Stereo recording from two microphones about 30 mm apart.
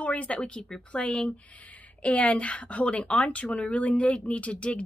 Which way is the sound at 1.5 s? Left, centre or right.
Left.